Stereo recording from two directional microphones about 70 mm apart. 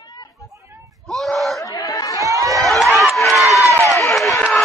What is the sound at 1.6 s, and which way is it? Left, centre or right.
Chatter, left.